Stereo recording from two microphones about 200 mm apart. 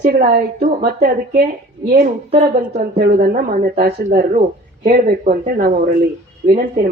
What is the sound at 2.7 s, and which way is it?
Speech, 45° right (ahead or behind).